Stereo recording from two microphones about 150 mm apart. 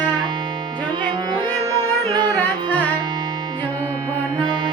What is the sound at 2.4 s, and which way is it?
Music, 10° left (ahead or behind).